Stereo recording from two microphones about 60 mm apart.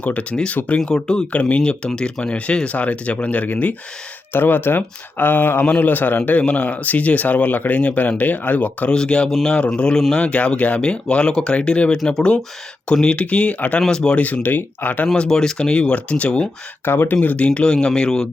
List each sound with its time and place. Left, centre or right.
0.0 s speech: left
8.9 s speech: centre
13.8 s speech: centre
14.2 s speech: left
15.0 s speech: centre
16.8 s speech: left
17.2 s speech: left